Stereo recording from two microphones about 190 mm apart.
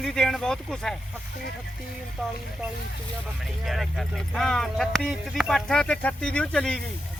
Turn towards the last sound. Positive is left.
turn(degrees=5)  # may be behind; listen again after turning